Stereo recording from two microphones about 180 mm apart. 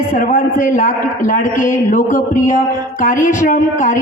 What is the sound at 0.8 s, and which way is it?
A man's voice, 45° left (ahead or behind).